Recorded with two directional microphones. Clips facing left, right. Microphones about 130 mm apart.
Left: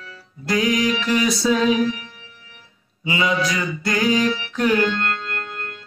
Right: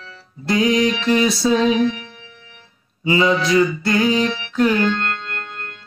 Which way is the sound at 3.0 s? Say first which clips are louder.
Right 4 dB; 30° right (ahead or behind).